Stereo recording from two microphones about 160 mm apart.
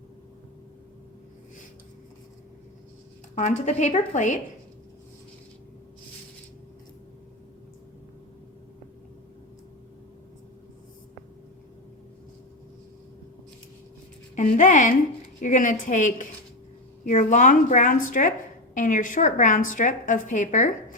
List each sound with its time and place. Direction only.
3.3 s a woman's voice: 50° left (ahead or behind)
14.3 s a woman's voice: 50° left (ahead or behind)